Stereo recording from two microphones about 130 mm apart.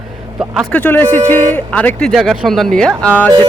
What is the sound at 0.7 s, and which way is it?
Speech, 15° left (ahead or behind).